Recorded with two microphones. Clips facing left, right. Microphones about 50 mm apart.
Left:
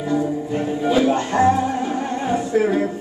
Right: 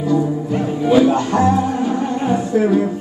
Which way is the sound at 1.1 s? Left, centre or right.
Left.